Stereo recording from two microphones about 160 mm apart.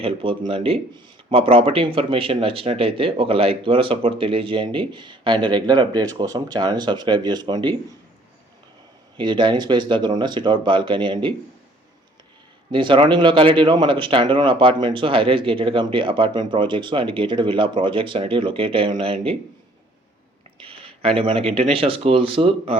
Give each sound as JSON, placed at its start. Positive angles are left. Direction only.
{"t": 0.0, "sound": "speech", "side_deg": -35}
{"t": 9.1, "sound": "speech", "side_deg": -30}
{"t": 12.7, "sound": "speech", "side_deg": -30}
{"t": 20.7, "sound": "speech", "side_deg": -35}